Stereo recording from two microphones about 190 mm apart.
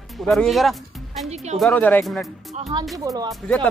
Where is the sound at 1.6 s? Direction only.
10° left (ahead or behind).